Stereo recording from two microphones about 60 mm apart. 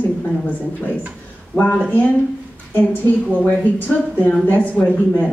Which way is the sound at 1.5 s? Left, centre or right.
Left.